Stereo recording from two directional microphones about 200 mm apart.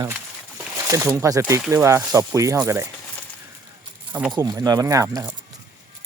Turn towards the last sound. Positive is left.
turn(degrees=-15)  # may be behind; listen again after turning